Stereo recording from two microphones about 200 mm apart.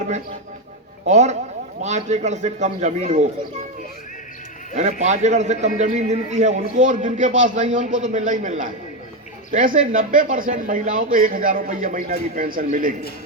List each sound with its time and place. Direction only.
1.0 s a man's voice: 35° right (ahead or behind)
4.7 s a man's voice: 35° right (ahead or behind)